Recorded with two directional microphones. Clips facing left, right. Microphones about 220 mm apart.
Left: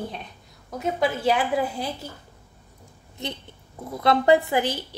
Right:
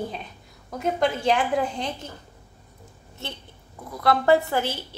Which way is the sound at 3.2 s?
15° left (ahead or behind).